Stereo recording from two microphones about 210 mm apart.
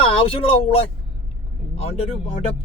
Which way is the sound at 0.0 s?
25° left (ahead or behind).